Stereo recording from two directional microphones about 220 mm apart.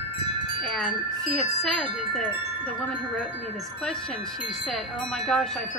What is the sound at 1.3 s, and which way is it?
Speech, centre (ahead or behind).